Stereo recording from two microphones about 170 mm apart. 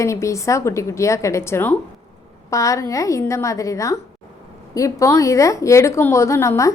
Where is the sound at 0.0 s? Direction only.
15° left (ahead or behind).